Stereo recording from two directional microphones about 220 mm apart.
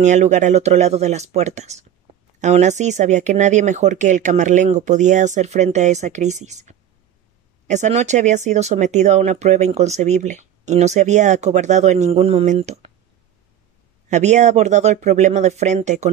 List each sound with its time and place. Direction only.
0.0 s speech: 35° right (ahead or behind)
14.0 s speech: 30° right (ahead or behind)